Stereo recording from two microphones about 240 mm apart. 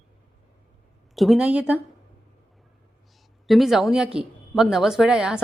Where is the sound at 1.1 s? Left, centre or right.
Centre.